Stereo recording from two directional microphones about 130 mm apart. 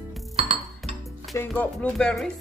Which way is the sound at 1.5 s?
10° left (ahead or behind).